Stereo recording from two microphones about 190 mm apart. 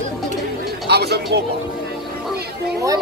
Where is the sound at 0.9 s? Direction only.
60° right (ahead or behind).